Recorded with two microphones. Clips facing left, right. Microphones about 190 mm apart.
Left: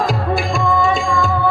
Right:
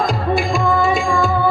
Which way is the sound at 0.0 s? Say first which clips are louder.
Right 1 dB; centre (ahead or behind).